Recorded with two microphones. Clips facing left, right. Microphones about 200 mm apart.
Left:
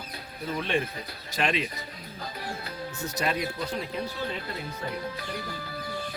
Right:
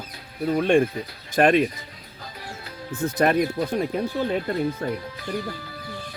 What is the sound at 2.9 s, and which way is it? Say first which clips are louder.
Speech: right 10 dB; 55° right (ahead or behind).